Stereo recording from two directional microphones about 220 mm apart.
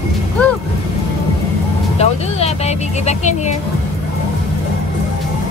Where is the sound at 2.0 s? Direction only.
30° left (ahead or behind).